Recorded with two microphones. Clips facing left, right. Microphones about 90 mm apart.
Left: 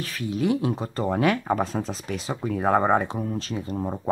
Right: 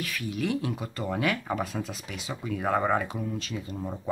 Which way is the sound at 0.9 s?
35° left (ahead or behind).